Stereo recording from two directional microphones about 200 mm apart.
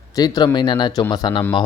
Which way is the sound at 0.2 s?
20° left (ahead or behind).